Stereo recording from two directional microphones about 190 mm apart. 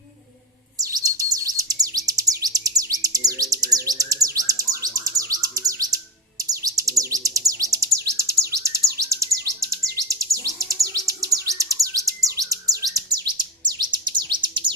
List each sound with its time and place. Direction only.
0.8 s bird: 20° right (ahead or behind)
2.4 s chirp: 20° right (ahead or behind)
3.5 s bird: 20° right (ahead or behind)
6.5 s chirp: 20° right (ahead or behind)
11.4 s bird: 15° right (ahead or behind)